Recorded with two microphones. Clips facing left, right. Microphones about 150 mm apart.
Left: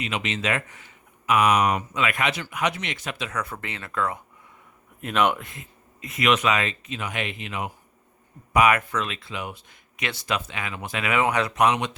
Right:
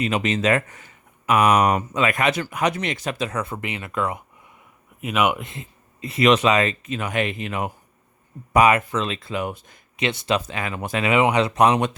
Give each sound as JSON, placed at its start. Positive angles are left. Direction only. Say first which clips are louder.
{"t": 0.0, "sound": "speech", "louder": "right 7 dB", "side_deg": -40}
{"t": 3.4, "sound": "speech", "louder": "right 5 dB", "side_deg": -20}
{"t": 4.9, "sound": "speech", "louder": "right 1 dB", "side_deg": -5}
{"t": 5.4, "sound": "speech", "louder": "right 5 dB", "side_deg": -25}
{"t": 8.5, "sound": "speech", "louder": "right 3 dB", "side_deg": -30}
{"t": 9.2, "sound": "speech", "louder": "right 7 dB", "side_deg": -45}
{"t": 10.0, "sound": "speech", "louder": "right 6 dB", "side_deg": -25}
{"t": 11.0, "sound": "speech", "louder": "right 4 dB", "side_deg": -20}